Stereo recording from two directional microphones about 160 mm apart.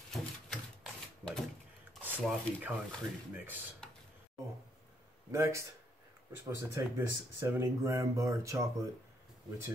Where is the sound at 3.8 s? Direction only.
5° left (ahead or behind).